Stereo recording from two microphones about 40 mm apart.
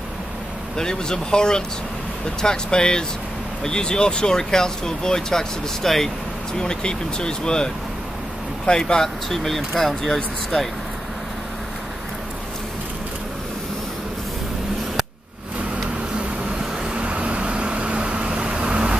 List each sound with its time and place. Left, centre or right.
0.7 s speech: centre
6.6 s speech: left
16.9 s vehicle: right